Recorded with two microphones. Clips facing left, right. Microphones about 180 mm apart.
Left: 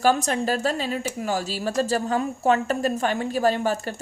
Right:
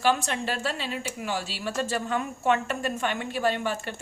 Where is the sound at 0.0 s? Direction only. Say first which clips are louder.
Left 4 dB; 40° left (ahead or behind).